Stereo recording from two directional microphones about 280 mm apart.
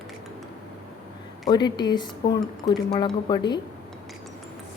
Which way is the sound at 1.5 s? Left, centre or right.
Centre.